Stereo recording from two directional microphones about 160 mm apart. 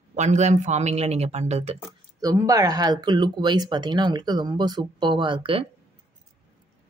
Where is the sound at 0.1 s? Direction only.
45° right (ahead or behind).